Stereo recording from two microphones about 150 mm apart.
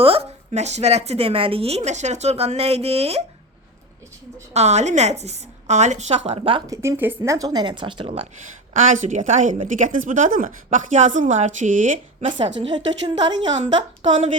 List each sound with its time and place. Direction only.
0.0 s a woman's voice: 40° right (ahead or behind)
4.5 s a woman's voice: 50° right (ahead or behind)
6.7 s speech: 15° right (ahead or behind)
7.2 s a woman's voice: 25° right (ahead or behind)
8.7 s a woman's voice: 55° right (ahead or behind)
12.4 s a woman's voice: 30° right (ahead or behind)